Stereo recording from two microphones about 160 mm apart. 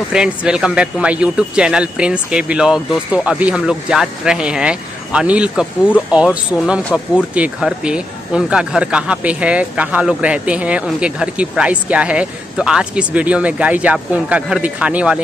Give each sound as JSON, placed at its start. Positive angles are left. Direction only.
{"t": 0.1, "sound": "speech", "side_deg": -5}
{"t": 7.3, "sound": "speech", "side_deg": -5}